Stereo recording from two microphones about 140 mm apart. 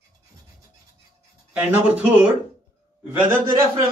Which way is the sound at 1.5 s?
10° right (ahead or behind).